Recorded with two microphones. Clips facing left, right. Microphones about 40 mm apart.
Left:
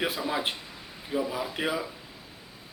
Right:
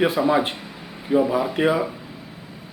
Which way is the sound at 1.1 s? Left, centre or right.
Right.